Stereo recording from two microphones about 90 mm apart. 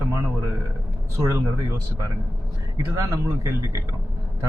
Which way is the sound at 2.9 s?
35° right (ahead or behind).